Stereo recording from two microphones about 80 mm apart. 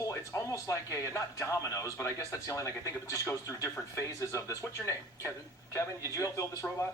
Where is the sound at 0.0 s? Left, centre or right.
Left.